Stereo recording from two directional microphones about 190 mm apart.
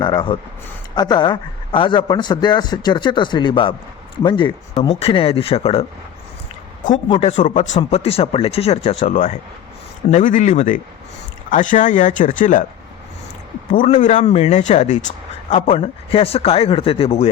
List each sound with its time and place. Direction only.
0.0 s a man's voice: 25° left (ahead or behind)
7.1 s speech: 35° left (ahead or behind)
13.7 s speech: 40° left (ahead or behind)
15.7 s speech: 30° left (ahead or behind)